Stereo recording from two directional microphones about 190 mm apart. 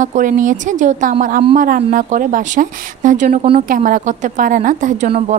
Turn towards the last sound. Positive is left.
turn(degrees=-40)  # may be behind; listen again after turning